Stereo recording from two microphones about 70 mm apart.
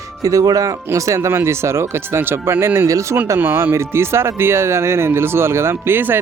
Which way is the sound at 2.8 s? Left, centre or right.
Right.